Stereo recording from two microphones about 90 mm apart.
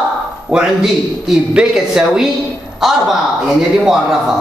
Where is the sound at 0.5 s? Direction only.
10° right (ahead or behind).